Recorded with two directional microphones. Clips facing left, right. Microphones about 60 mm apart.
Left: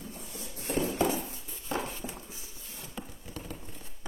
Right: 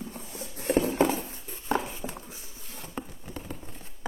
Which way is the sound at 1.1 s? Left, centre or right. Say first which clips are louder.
Right 1 dB; right.